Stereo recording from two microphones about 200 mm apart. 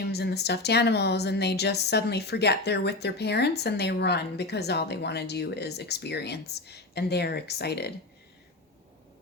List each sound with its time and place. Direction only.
0.0 s a woman's voice: 55° left (ahead or behind)